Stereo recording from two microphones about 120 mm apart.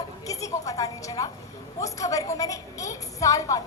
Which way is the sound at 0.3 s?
30° left (ahead or behind).